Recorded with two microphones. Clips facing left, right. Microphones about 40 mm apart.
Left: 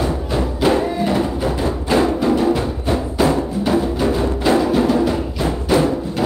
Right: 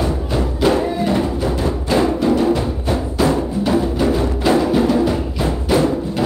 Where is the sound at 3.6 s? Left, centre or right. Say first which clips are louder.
Right 1 dB; centre.